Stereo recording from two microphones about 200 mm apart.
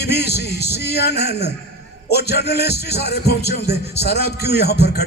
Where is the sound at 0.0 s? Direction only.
55° left (ahead or behind).